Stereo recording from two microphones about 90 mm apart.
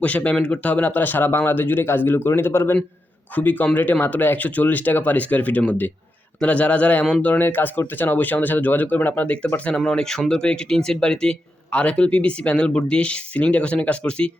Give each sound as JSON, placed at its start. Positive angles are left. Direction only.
{"t": 0.0, "sound": "speech", "side_deg": 15}